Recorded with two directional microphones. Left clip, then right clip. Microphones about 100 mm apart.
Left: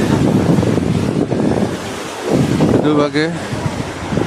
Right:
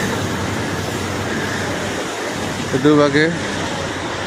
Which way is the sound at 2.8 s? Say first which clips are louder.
Right 2 dB; 90° left.